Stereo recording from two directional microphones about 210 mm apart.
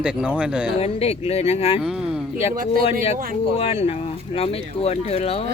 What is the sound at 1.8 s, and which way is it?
Speech, 5° right (ahead or behind).